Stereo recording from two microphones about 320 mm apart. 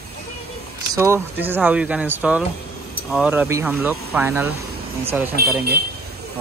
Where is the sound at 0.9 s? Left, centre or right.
Centre.